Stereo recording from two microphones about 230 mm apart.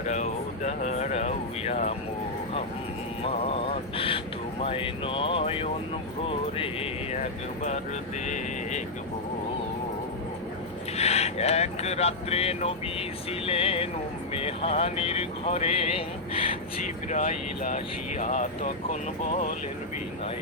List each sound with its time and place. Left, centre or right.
0.1 s speech: left
3.2 s mantra: left
4.6 s speech: left
6.2 s a sound: left
10.9 s speech: left